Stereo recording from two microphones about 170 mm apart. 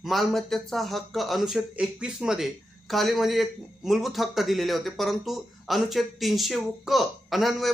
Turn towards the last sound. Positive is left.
turn(degrees=0)  # may be behind; listen again after turning